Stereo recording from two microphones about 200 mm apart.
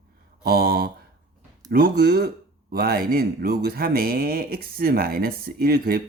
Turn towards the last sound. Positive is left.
turn(degrees=-50)  # may be behind; listen again after turning